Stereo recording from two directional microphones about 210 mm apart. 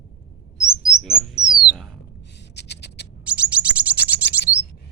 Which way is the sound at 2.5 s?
55° left (ahead or behind).